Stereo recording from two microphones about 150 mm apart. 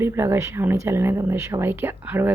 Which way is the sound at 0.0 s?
15° right (ahead or behind).